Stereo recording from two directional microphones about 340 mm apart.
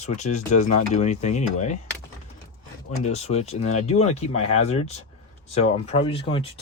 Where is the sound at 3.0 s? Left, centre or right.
Centre.